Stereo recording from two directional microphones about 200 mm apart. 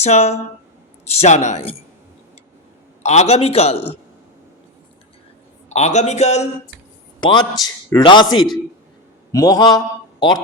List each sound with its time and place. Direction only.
0.0 s a man's voice: 35° left (ahead or behind)
3.0 s a man's voice: 35° left (ahead or behind)
5.6 s a man's voice: 35° left (ahead or behind)
7.2 s a man's voice: 25° left (ahead or behind)
9.3 s mantra: 20° left (ahead or behind)